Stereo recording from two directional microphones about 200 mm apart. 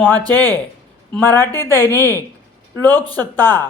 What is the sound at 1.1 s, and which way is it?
Speech, 10° left (ahead or behind).